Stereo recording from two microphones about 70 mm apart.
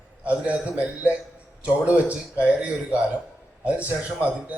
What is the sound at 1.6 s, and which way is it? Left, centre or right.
A man's voice, centre.